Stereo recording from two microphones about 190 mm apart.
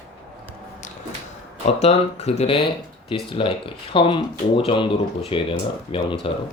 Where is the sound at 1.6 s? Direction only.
35° left (ahead or behind).